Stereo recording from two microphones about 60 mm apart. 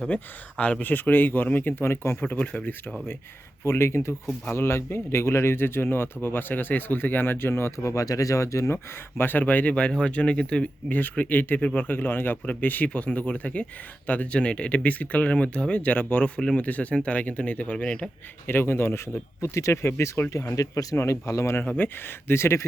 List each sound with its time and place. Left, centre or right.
0.0 s speech: left
3.6 s speech: left
7.9 s speech: left
8.7 s speech: left
9.4 s speech: left
18.4 s speech: left
21.6 s speech: left